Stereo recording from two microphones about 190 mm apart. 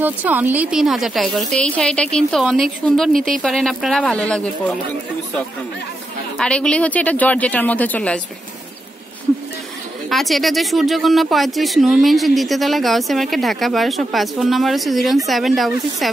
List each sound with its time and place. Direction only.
0.0 s speech: 10° right (ahead or behind)
6.3 s a woman's voice: 5° left (ahead or behind)
10.0 s speech: centre (ahead or behind)